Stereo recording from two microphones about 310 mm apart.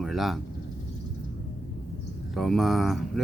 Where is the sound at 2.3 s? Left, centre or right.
Centre.